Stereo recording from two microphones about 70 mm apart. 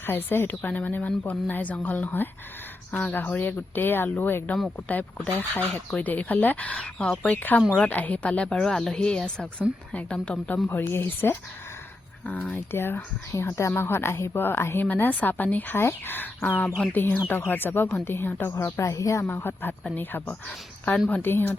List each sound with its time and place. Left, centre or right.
0.0 s speech: left
8.6 s speech: centre
10.7 s speech: left
12.2 s speech: centre
12.5 s speech: left
13.4 s speech: left
18.6 s speech: left
19.2 s speech: left
21.1 s speech: left